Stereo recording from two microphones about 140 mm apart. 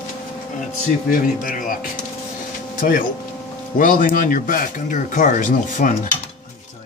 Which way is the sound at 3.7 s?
75° left (ahead or behind).